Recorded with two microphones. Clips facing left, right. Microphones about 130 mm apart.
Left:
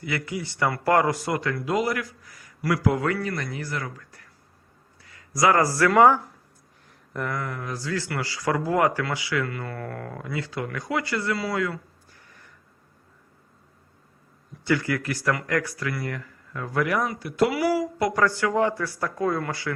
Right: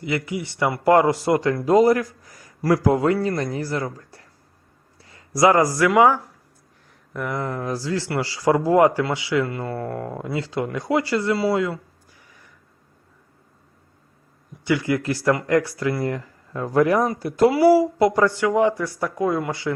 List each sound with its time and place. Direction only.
0.0 s speech: 20° right (ahead or behind)
7.4 s speech: 35° right (ahead or behind)
14.6 s speech: 15° right (ahead or behind)